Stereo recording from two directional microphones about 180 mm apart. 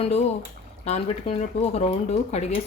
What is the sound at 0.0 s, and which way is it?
Speech, 35° left (ahead or behind).